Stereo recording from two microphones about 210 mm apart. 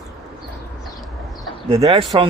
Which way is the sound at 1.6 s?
25° right (ahead or behind).